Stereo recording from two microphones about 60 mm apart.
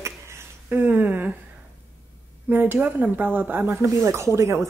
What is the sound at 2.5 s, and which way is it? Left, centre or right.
A woman's voice, right.